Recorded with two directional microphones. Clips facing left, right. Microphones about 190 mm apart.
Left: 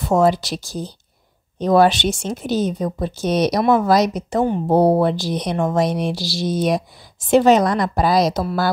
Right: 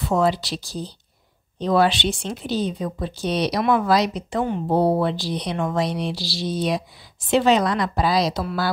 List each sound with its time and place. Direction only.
0.0 s speech: 45° left (ahead or behind)